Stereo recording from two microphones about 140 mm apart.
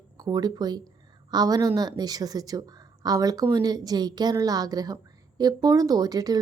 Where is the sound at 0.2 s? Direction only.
30° right (ahead or behind).